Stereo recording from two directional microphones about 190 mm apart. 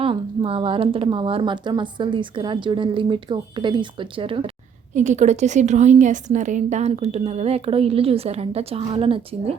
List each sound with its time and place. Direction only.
0.0 s a woman's voice: 30° right (ahead or behind)